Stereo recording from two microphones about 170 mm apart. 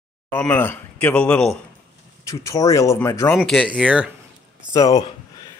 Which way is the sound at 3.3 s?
Centre (ahead or behind).